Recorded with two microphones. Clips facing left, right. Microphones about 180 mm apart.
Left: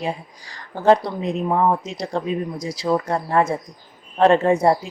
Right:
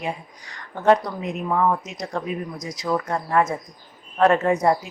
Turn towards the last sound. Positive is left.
turn(degrees=30)  # may be behind; listen again after turning